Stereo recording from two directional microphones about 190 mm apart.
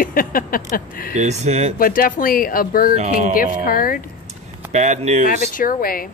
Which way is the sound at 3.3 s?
50° left (ahead or behind).